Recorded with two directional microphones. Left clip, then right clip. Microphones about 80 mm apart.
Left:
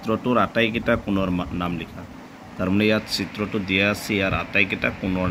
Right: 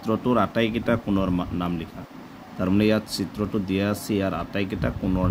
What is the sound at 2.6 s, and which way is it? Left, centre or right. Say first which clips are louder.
Speech: left 1 dB; right.